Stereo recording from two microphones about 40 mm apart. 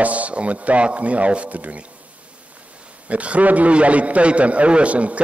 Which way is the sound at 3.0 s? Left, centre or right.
Right.